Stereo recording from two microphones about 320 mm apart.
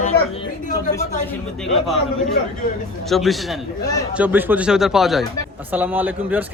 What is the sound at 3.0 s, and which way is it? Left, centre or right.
A man's voice, centre.